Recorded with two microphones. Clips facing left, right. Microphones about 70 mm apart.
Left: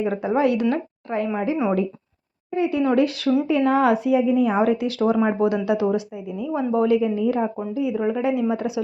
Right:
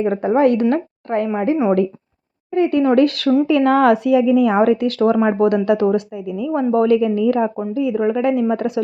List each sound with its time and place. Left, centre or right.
0.0 s a woman's voice: right
2.6 s speech: right
3.4 s a woman's voice: right
4.6 s speech: right
7.7 s speech: right